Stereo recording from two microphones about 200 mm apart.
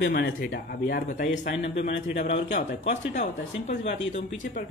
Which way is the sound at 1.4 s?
60° left (ahead or behind).